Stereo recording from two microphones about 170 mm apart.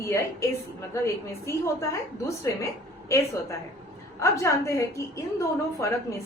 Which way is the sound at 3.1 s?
15° left (ahead or behind).